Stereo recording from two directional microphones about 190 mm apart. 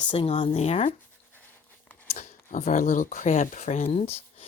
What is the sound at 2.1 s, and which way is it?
Speech, 40° left (ahead or behind).